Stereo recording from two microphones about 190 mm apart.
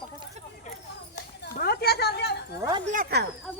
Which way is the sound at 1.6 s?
55° left (ahead or behind).